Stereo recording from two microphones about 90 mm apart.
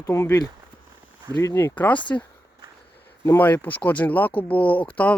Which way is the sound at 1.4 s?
25° left (ahead or behind).